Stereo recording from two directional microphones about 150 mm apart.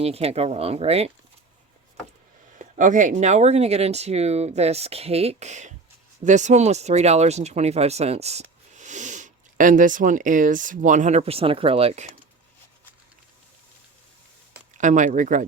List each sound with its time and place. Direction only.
0.0 s speech: 40° right (ahead or behind)
2.6 s speech: 55° right (ahead or behind)
14.8 s speech: 55° right (ahead or behind)